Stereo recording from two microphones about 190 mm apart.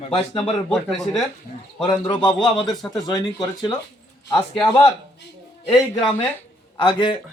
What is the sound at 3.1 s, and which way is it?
Speech, 20° left (ahead or behind).